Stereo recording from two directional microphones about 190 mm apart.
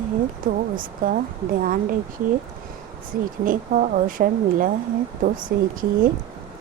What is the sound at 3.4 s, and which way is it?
A woman's voice, 45° right (ahead or behind).